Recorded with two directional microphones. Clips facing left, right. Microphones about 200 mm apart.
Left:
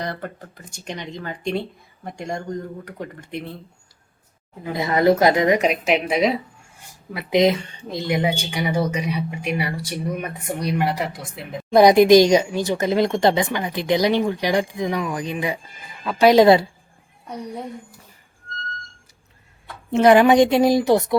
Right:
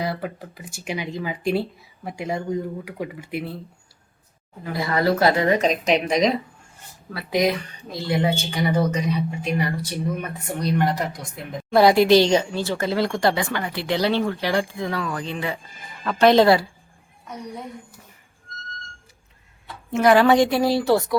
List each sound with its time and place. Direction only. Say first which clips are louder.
0.0 s speech: right 2 dB; 5° right (ahead or behind)
4.6 s speech: left 4 dB; 20° left (ahead or behind); by 6.4 s 5° left (ahead or behind)
7.1 s speech: left 4 dB; 20° left (ahead or behind)
19.9 s a woman's voice: left 3 dB; 20° left (ahead or behind)